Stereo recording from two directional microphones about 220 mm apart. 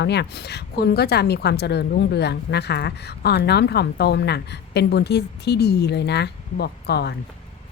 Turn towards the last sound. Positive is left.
turn(degrees=50)  # may be behind; listen again after turning